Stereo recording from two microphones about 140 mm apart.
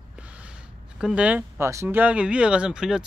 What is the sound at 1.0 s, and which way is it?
Speech, 10° right (ahead or behind).